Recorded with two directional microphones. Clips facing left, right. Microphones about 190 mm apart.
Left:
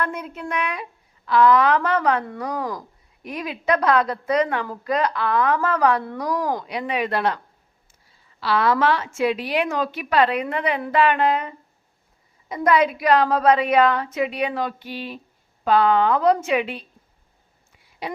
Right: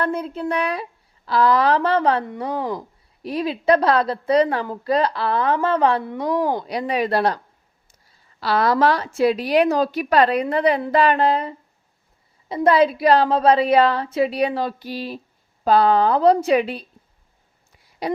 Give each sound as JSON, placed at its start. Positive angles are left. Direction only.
{"t": 0.0, "sound": "speech", "side_deg": -30}
{"t": 18.0, "sound": "speech", "side_deg": -40}